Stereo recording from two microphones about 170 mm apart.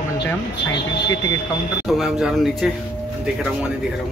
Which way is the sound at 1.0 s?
20° left (ahead or behind).